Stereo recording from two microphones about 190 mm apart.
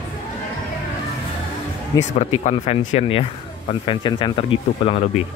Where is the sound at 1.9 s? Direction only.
20° left (ahead or behind).